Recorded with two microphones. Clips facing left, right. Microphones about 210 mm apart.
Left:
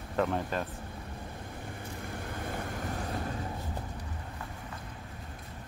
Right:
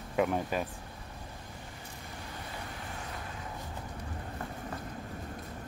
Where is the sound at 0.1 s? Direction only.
10° right (ahead or behind).